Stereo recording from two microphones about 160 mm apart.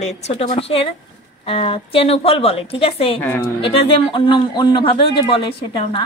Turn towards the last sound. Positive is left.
turn(degrees=30)  # may be behind; listen again after turning